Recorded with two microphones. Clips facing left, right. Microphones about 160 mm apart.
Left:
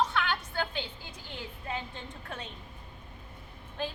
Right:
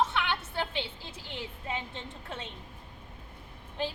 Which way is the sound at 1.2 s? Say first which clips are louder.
Right 2 dB; 85° right.